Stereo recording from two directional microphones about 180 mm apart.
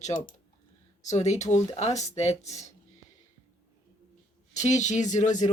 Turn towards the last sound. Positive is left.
turn(degrees=45)  # may be behind; listen again after turning